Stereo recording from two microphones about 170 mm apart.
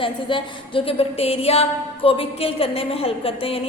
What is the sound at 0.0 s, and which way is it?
A woman's voice, 30° left (ahead or behind).